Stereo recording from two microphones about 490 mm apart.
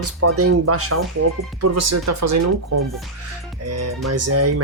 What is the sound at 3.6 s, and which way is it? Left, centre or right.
Speech, right.